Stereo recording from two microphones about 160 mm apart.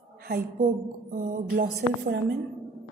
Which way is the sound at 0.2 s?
70° right (ahead or behind).